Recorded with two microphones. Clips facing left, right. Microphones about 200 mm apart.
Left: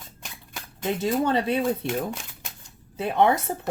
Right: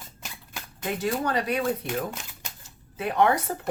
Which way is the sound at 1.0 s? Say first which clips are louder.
Left 3 dB; 25° left (ahead or behind).